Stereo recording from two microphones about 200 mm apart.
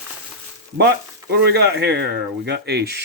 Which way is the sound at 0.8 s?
55° right (ahead or behind).